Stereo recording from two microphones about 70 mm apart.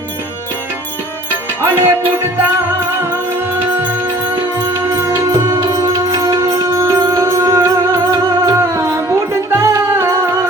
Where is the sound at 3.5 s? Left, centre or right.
Right.